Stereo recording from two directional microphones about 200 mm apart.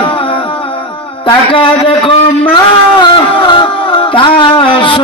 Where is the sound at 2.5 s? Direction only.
25° left (ahead or behind).